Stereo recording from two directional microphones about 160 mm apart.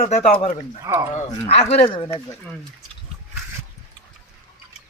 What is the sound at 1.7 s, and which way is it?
Speech, 35° left (ahead or behind).